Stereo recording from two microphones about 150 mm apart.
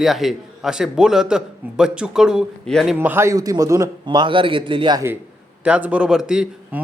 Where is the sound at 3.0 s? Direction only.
15° right (ahead or behind).